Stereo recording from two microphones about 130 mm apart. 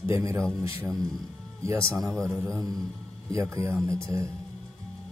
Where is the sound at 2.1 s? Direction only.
Centre (ahead or behind).